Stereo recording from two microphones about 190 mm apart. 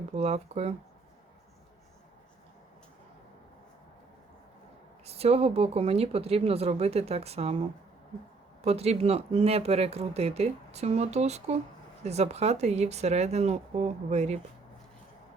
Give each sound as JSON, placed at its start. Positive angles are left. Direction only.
{"t": 0.1, "sound": "speech", "side_deg": -35}
{"t": 5.0, "sound": "speech", "side_deg": -30}
{"t": 8.6, "sound": "speech", "side_deg": -35}